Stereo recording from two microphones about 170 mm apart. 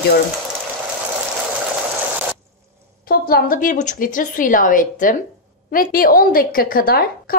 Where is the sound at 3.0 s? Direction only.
60° left (ahead or behind).